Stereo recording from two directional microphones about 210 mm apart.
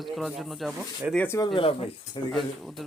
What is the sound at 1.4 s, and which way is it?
Speech, 25° left (ahead or behind).